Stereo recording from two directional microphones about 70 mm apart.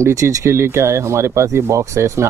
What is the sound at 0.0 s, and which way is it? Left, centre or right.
Speech, right.